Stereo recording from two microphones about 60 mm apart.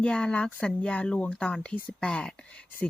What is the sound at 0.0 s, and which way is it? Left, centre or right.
Speech, centre.